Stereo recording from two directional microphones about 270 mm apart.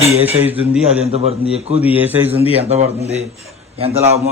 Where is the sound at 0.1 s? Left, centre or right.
Centre.